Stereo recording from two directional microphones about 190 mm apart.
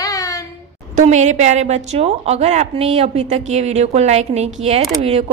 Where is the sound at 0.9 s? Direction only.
40° right (ahead or behind).